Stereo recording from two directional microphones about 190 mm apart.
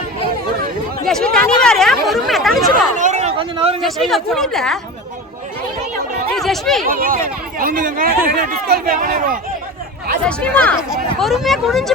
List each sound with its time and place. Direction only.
1.0 s speech: 5° left (ahead or behind)
3.0 s a sound: 35° right (ahead or behind)
3.8 s speech: centre (ahead or behind)
6.3 s speech: centre (ahead or behind)
6.8 s speech: 50° right (ahead or behind)
10.2 s speech: 5° left (ahead or behind)